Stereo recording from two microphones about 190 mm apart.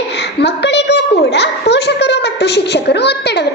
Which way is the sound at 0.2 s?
60° left (ahead or behind).